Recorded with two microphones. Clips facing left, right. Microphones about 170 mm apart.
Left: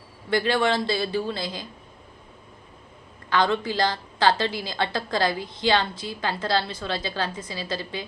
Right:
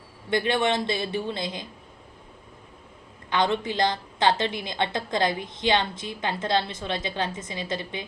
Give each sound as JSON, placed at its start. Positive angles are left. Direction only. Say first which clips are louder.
{"t": 0.3, "sound": "a woman's voice", "louder": "left 1 dB", "side_deg": -20}
{"t": 3.2, "sound": "a woman's voice", "louder": "left 1 dB", "side_deg": -20}